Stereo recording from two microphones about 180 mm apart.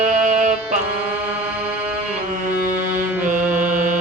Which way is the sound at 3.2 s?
45° right (ahead or behind).